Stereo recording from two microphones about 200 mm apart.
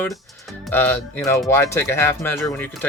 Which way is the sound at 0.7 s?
10° left (ahead or behind).